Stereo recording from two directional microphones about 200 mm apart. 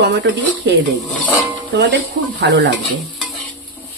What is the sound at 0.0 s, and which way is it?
Speech, 60° right (ahead or behind).